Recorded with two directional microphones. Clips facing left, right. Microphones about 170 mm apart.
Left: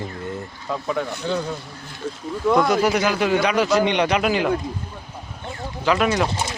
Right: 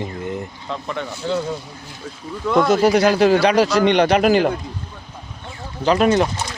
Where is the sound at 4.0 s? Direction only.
40° right (ahead or behind).